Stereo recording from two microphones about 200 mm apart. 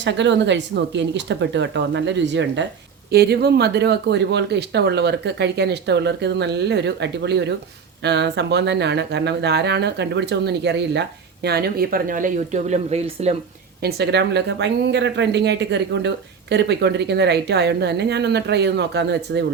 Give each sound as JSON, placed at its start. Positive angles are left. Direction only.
{"t": 0.0, "sound": "speech", "side_deg": -65}
{"t": 13.8, "sound": "speech", "side_deg": -55}